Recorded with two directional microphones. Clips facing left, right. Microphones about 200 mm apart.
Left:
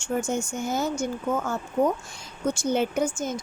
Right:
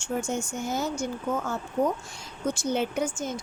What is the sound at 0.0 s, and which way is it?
Speech, 50° left (ahead or behind).